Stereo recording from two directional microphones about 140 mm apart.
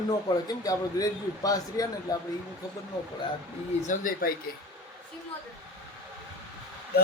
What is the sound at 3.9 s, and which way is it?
Speech, 85° left.